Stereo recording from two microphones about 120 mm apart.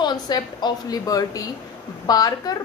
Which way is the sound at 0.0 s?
35° left (ahead or behind).